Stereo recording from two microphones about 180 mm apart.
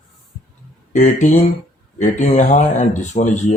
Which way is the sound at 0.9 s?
45° left (ahead or behind).